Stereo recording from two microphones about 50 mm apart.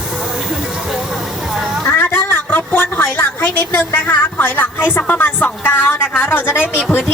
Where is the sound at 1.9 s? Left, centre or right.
Left.